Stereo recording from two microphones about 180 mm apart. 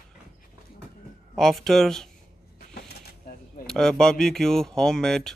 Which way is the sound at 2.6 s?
60° left (ahead or behind).